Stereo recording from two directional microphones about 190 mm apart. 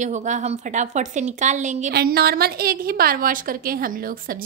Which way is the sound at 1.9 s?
55° right (ahead or behind).